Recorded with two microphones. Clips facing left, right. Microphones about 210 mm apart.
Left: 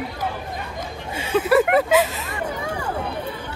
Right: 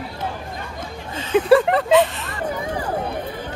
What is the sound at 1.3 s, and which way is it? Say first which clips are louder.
Speech: right 3 dB; 20° right (ahead or behind).